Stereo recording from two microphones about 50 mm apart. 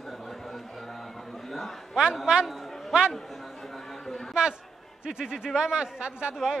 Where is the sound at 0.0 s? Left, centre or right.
Centre.